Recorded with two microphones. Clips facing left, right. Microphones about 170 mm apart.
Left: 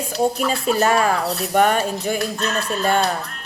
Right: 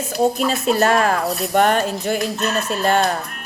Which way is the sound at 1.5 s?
50° right (ahead or behind).